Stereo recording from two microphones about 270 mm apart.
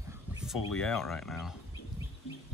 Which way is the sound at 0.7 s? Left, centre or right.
Centre.